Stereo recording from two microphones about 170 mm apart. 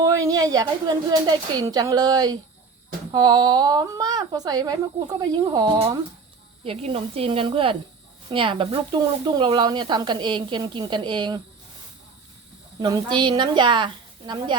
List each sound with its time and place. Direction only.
0.0 s speech: 20° right (ahead or behind)
12.8 s speech: 25° right (ahead or behind)